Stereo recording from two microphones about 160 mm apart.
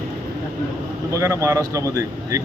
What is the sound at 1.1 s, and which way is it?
Speech, 20° right (ahead or behind).